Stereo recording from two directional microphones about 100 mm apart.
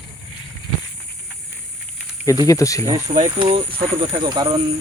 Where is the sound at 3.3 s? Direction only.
60° right (ahead or behind); by 4.6 s 45° right (ahead or behind).